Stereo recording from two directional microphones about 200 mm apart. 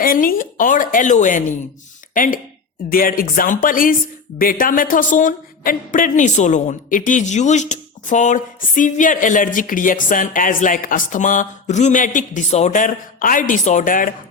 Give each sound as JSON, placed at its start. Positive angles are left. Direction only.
{"t": 0.0, "sound": "a woman's voice", "side_deg": 45}